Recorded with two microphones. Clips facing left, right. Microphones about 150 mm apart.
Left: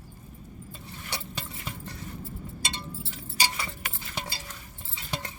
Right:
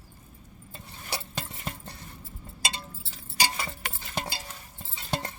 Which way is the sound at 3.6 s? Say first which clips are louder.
Right 1 dB; 45° right (ahead or behind).